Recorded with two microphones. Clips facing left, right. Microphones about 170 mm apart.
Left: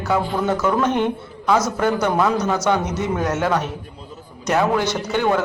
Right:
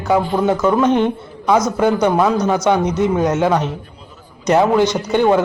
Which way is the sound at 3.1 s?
15° right (ahead or behind).